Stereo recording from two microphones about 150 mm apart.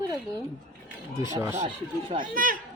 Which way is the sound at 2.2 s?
65° right (ahead or behind).